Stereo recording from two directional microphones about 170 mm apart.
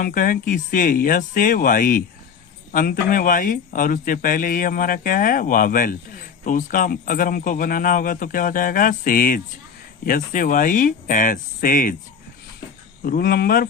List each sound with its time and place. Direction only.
0.0 s speech: 55° left (ahead or behind)
13.1 s speech: 60° left (ahead or behind)